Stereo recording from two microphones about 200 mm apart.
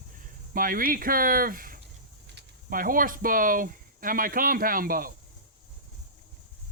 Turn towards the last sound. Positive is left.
turn(degrees=-45)  # may be behind; listen again after turning